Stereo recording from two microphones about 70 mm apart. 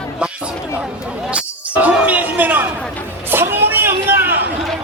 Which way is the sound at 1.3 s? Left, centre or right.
Centre.